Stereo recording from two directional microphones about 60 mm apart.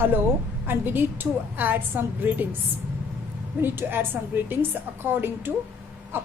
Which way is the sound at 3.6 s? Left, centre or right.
Right.